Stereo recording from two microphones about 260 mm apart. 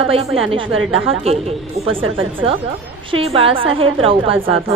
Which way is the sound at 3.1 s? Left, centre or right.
Right.